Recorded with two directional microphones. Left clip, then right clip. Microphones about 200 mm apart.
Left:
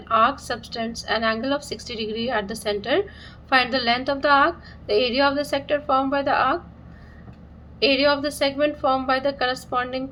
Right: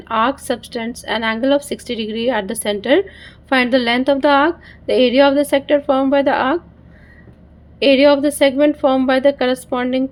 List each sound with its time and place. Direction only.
0.1 s speech: 40° right (ahead or behind)
7.8 s speech: 40° right (ahead or behind)